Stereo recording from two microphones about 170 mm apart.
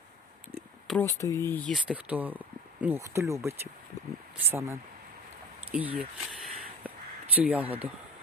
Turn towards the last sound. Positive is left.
turn(degrees=-10)  # may be behind; listen again after turning